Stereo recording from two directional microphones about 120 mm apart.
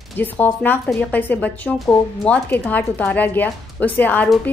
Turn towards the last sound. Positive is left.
turn(degrees=15)  # may be behind; listen again after turning